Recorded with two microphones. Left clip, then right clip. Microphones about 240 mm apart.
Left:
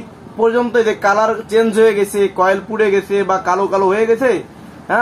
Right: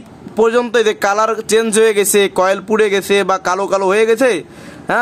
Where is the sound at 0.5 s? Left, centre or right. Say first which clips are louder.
Left 1 dB; right.